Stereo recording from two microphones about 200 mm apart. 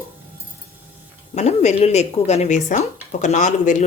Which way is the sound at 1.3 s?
35° left (ahead or behind).